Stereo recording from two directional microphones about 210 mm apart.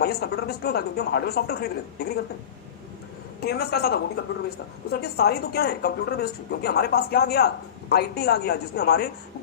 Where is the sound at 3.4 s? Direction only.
50° left (ahead or behind).